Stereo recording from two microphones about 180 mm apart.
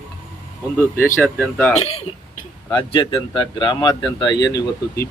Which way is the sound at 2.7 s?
30° left (ahead or behind).